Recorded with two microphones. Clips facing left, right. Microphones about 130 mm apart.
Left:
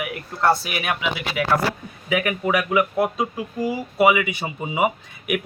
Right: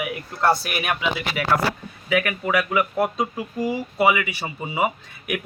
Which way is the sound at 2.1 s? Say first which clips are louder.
Left 1 dB; 20° left (ahead or behind).